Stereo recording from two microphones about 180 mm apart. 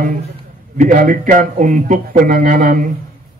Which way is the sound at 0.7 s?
45° right (ahead or behind).